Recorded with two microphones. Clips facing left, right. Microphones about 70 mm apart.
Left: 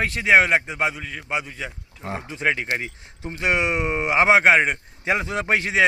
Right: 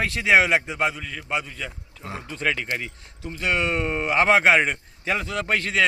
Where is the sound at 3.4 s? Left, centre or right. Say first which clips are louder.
Left 2 dB; centre.